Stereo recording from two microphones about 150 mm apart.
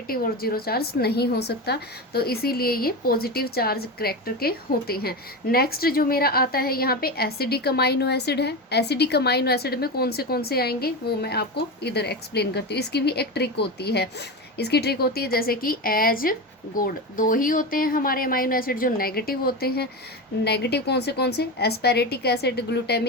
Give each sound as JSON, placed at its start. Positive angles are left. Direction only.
{"t": 0.1, "sound": "a woman's voice", "side_deg": 90}